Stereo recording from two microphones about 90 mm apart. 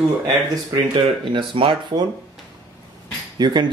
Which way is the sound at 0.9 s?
65° right (ahead or behind).